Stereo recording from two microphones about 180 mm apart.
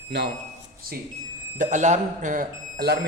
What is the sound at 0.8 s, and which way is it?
Speech, 55° right (ahead or behind).